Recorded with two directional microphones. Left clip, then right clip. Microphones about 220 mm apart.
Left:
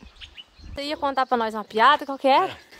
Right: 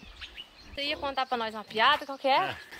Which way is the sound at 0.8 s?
30° left (ahead or behind).